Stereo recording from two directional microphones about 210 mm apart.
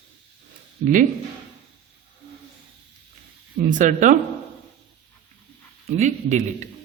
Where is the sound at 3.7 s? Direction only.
35° right (ahead or behind).